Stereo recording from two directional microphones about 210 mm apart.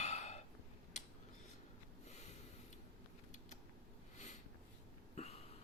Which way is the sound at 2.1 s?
30° left (ahead or behind).